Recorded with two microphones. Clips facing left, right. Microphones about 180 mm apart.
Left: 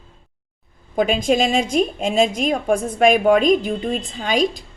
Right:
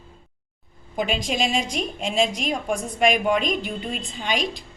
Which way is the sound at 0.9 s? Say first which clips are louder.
Left 8 dB; 50° left (ahead or behind).